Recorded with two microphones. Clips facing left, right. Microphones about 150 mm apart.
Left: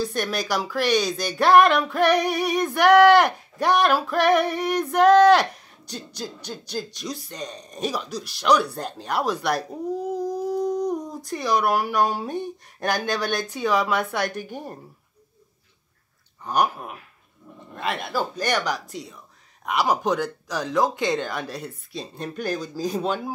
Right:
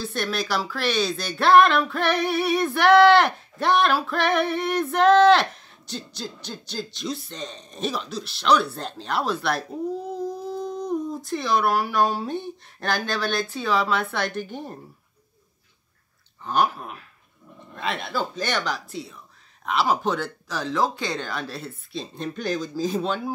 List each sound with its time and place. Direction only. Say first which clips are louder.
0.0 s speech: left 2 dB; 15° left (ahead or behind)
16.4 s speech: even; 15° left (ahead or behind)